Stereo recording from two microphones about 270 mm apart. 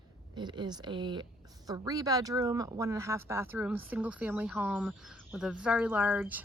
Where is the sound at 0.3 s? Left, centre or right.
Centre.